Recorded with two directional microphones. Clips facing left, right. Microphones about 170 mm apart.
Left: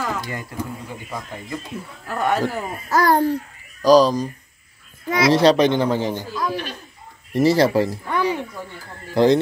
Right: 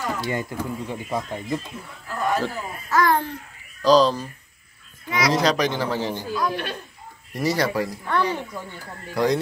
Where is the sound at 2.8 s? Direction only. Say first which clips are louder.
Left 4 dB; 40° left (ahead or behind).